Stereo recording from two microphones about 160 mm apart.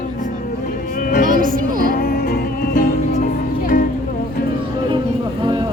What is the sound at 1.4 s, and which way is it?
Music, 60° right (ahead or behind).